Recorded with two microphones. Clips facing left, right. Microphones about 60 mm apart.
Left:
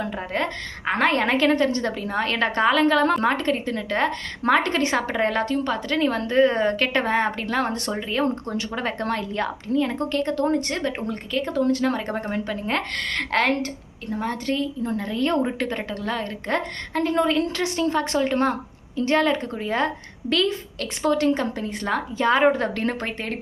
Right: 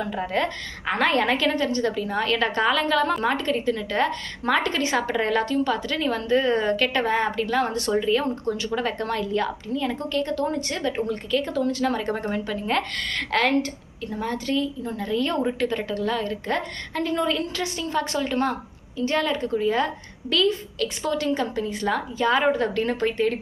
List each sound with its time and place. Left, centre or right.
0.3 s a woman's voice: left
7.9 s speech: left
8.4 s speech: left
8.7 s a woman's voice: left
10.0 s a woman's voice: left
13.0 s speech: left
13.3 s a woman's voice: left